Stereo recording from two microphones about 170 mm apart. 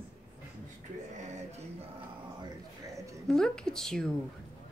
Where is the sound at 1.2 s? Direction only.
45° right (ahead or behind).